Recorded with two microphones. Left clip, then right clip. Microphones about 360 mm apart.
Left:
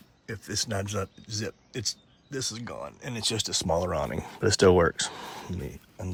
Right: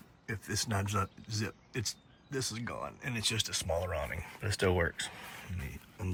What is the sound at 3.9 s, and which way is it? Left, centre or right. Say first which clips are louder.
Speech: left 7 dB; left.